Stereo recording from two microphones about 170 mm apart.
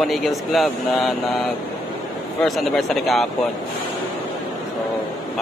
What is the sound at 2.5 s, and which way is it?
Speech, centre (ahead or behind).